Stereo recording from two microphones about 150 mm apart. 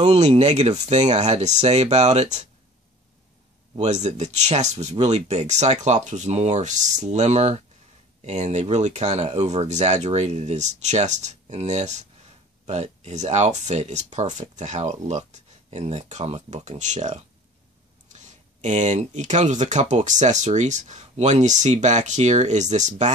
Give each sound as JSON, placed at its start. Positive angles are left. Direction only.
{"t": 0.0, "sound": "speech", "side_deg": -45}
{"t": 3.7, "sound": "speech", "side_deg": -50}